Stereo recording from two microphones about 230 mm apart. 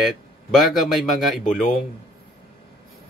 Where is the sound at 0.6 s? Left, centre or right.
Centre.